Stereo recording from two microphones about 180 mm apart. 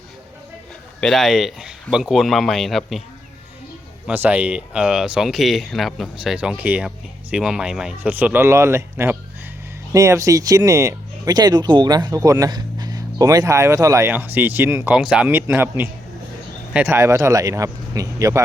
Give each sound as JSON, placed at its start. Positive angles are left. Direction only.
{"t": 1.0, "sound": "speech", "side_deg": 0}
{"t": 4.0, "sound": "speech", "side_deg": -10}